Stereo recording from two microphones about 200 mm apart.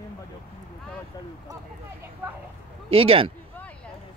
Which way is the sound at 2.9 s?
25° right (ahead or behind).